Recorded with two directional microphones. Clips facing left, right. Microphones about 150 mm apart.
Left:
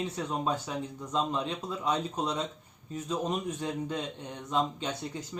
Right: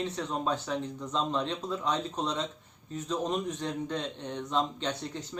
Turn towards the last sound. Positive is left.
turn(degrees=10)  # may be behind; listen again after turning